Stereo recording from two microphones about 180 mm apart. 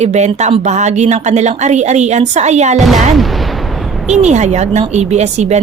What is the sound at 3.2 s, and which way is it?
Artillery fire, centre (ahead or behind).